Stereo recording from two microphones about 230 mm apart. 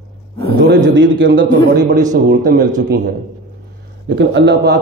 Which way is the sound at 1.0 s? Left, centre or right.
Right.